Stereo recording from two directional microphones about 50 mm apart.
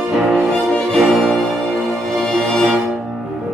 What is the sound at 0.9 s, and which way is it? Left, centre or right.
Music, centre.